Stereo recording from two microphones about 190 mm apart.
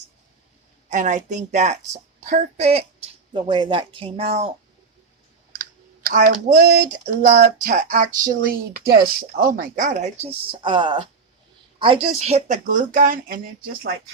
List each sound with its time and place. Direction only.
0.9 s speech: 40° right (ahead or behind)
5.5 s speech: 45° right (ahead or behind)